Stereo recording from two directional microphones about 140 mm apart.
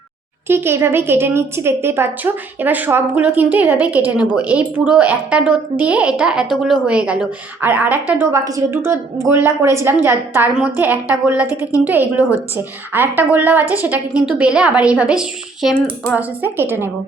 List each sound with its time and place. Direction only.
0.4 s a woman's voice: 15° right (ahead or behind)